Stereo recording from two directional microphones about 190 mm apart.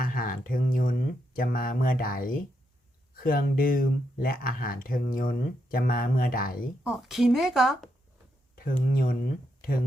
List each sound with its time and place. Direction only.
0.0 s a sound: 45° left (ahead or behind)
3.2 s speech: 50° left (ahead or behind)
6.8 s a woman's voice: centre (ahead or behind)
8.5 s speech: 50° left (ahead or behind)